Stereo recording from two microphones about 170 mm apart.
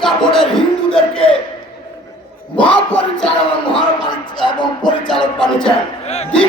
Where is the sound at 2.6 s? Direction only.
5° left (ahead or behind).